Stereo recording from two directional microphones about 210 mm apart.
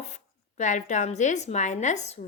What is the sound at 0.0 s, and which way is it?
A woman's voice, 35° left (ahead or behind).